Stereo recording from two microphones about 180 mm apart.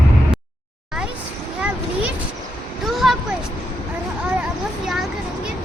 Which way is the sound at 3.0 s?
Centre (ahead or behind).